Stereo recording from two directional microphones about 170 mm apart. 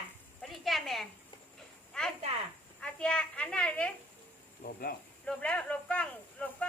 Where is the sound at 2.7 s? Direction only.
5° left (ahead or behind).